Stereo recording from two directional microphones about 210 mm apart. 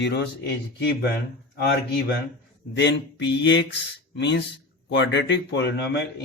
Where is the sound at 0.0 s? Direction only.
50° left (ahead or behind).